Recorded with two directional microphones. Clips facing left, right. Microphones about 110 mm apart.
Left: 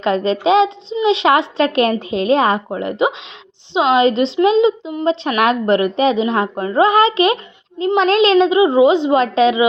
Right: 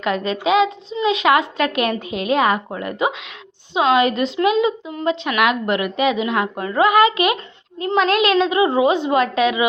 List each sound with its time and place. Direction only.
0.0 s a woman's voice: 30° left (ahead or behind)